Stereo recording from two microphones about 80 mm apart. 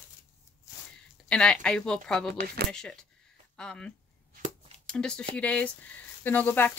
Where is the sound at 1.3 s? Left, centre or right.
Centre.